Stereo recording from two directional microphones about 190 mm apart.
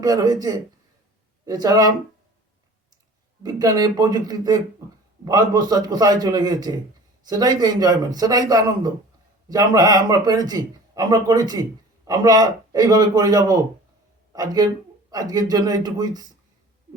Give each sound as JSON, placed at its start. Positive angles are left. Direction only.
{"t": 0.0, "sound": "a man's voice", "side_deg": -20}
{"t": 3.4, "sound": "a man's voice", "side_deg": -20}